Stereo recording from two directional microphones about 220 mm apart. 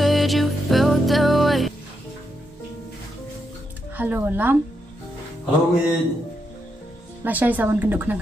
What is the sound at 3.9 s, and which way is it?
Speech, 10° right (ahead or behind).